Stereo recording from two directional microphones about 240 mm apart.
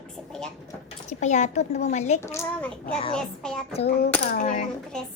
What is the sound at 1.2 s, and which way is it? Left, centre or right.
A woman's voice, left.